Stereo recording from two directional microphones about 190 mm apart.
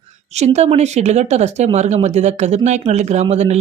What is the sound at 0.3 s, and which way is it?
Speech, 35° right (ahead or behind).